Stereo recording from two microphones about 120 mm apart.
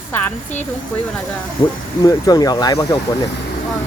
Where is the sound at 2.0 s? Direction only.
30° left (ahead or behind).